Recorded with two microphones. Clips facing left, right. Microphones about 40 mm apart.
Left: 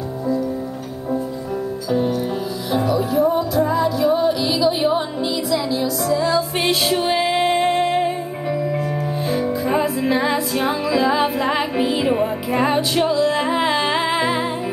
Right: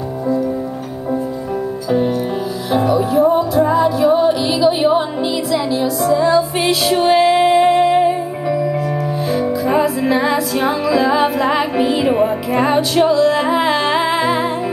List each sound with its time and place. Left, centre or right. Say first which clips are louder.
1.9 s music: right 3 dB; centre